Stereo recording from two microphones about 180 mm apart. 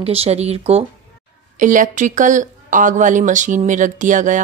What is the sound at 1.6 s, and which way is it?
Speech, 45° right (ahead or behind).